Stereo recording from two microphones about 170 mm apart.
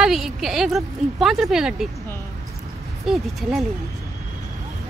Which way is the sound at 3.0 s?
Centre (ahead or behind).